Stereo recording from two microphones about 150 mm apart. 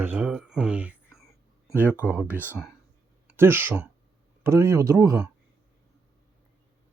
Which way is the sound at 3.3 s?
15° right (ahead or behind).